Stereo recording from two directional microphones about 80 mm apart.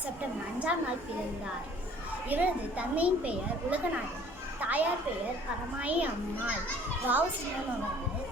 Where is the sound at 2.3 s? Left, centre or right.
Centre.